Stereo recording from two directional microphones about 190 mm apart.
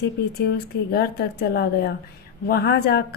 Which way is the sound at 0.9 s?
55° left (ahead or behind).